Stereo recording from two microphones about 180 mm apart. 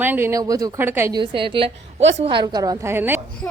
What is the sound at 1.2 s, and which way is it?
A woman's voice, 25° right (ahead or behind).